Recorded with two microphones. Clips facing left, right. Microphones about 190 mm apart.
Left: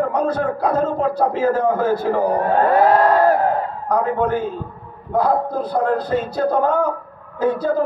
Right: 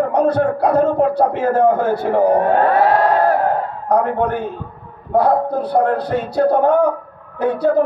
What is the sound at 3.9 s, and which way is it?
A man's voice, 65° right (ahead or behind).